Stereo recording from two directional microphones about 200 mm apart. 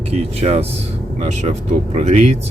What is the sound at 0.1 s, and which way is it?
Speech, 30° right (ahead or behind).